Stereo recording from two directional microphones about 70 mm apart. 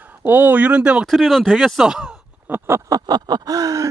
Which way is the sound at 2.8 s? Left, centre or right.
Right.